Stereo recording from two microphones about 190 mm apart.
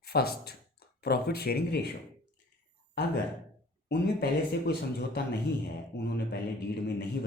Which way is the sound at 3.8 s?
60° left (ahead or behind).